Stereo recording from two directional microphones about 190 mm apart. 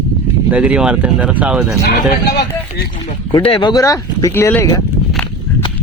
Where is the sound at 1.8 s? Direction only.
60° left (ahead or behind).